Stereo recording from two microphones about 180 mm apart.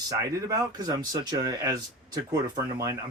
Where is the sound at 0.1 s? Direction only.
20° right (ahead or behind).